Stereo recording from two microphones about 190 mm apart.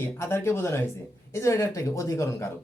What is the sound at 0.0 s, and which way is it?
A man's voice, 15° left (ahead or behind).